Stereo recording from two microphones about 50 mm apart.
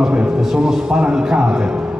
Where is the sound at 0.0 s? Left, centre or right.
Right.